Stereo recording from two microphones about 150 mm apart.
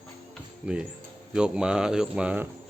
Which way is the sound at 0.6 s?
5° right (ahead or behind).